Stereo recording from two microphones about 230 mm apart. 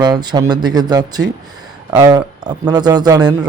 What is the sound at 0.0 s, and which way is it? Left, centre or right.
A man's voice, centre.